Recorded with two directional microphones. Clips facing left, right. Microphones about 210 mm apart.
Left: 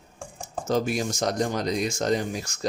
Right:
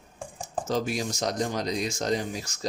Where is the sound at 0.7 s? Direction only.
50° left (ahead or behind).